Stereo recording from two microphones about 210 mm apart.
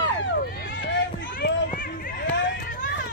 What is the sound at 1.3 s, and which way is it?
Run, 50° left (ahead or behind).